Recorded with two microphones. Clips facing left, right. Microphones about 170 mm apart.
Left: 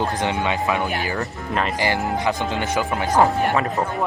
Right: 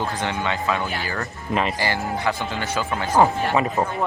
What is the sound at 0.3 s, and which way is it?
Speech, 15° left (ahead or behind).